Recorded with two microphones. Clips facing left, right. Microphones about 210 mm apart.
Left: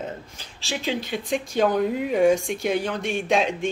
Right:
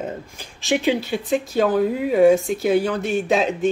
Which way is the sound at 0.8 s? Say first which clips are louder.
Right 6 dB; 10° right (ahead or behind).